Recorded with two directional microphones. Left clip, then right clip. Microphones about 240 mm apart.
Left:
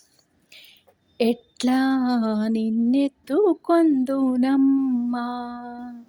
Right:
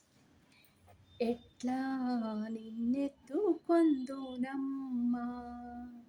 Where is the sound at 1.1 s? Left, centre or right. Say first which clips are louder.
Left 13 dB; left.